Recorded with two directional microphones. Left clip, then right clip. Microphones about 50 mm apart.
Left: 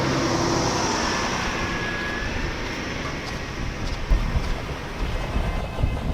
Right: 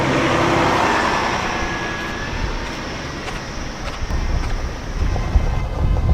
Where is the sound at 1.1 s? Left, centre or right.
Right.